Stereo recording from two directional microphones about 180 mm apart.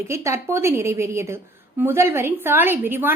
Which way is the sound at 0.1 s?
15° right (ahead or behind).